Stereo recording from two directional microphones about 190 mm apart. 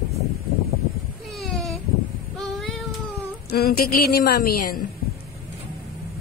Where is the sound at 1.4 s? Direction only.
Centre (ahead or behind).